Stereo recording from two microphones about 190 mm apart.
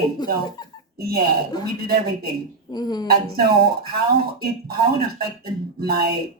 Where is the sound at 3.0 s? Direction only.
55° right (ahead or behind).